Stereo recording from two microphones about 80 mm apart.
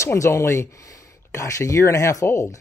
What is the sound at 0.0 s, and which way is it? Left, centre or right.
Speech, left.